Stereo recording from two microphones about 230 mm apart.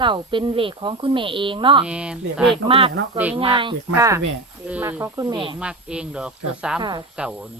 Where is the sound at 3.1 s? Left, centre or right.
Centre.